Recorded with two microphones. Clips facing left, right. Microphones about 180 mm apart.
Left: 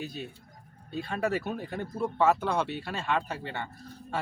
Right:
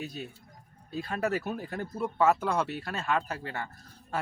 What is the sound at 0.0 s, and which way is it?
Speech, centre (ahead or behind).